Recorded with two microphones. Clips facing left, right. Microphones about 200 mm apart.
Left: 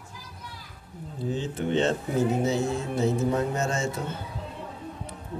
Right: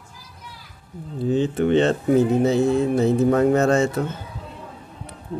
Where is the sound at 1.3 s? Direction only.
65° right (ahead or behind).